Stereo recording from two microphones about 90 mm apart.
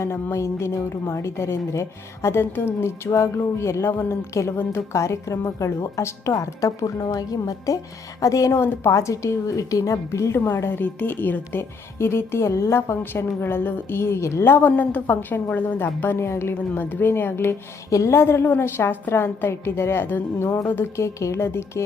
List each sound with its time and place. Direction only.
0.0 s a woman's voice: 30° left (ahead or behind)